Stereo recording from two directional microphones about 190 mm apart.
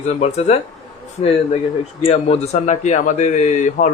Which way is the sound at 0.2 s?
35° left (ahead or behind).